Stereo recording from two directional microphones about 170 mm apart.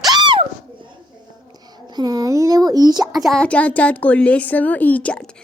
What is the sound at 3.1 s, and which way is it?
Speech, centre (ahead or behind).